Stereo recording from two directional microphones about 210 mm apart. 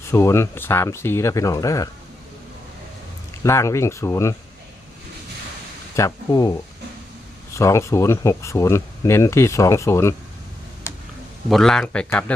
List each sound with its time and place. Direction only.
0.1 s speech: 15° left (ahead or behind)
3.4 s speech: 15° left (ahead or behind)
6.0 s speech: 15° left (ahead or behind)
7.5 s speech: 15° left (ahead or behind)
11.4 s speech: centre (ahead or behind)